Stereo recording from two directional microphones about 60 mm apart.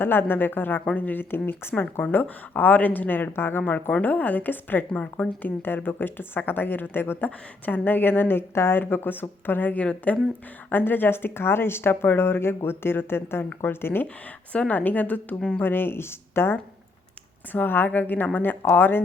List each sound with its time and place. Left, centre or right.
0.0 s a woman's voice: left
10.7 s speech: left
14.5 s a woman's voice: left
15.4 s speech: centre
15.6 s speech: left